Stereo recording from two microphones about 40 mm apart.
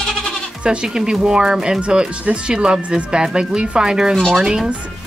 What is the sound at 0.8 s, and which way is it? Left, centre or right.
Speech, centre.